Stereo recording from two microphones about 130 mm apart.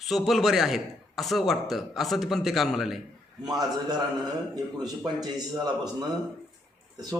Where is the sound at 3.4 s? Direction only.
30° right (ahead or behind).